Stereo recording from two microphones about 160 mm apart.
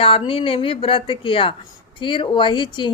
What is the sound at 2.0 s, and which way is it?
Speech, 30° left (ahead or behind).